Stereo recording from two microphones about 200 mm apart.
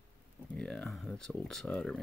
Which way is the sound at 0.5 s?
5° left (ahead or behind).